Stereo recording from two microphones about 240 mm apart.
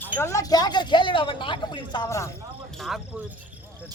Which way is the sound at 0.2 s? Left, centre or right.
Centre.